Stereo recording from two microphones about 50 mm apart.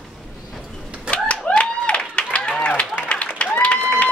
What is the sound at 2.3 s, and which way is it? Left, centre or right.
Run, left.